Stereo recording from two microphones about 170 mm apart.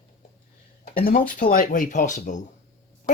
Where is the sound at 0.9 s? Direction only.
55° left (ahead or behind).